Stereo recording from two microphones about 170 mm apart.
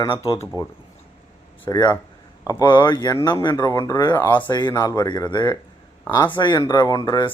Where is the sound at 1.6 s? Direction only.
20° left (ahead or behind).